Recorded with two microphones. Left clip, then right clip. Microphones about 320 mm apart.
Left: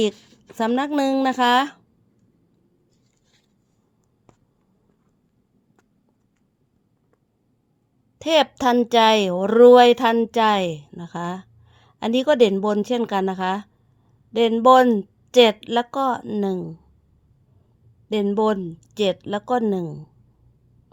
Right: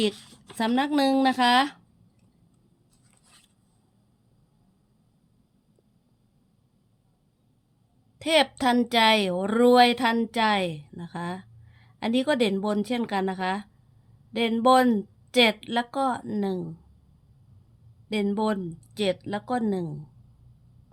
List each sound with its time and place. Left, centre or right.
0.5 s a woman's voice: centre
8.2 s a woman's voice: centre
18.1 s a woman's voice: centre